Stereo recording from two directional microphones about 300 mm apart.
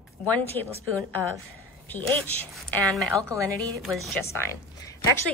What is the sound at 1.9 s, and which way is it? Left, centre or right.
Speech, centre.